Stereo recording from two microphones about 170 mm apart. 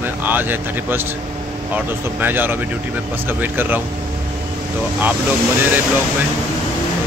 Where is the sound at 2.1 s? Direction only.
10° right (ahead or behind).